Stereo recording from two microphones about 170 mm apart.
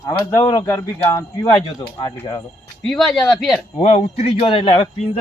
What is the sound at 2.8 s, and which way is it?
Speech, centre (ahead or behind).